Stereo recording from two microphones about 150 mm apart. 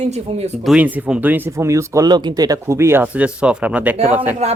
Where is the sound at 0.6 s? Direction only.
5° right (ahead or behind).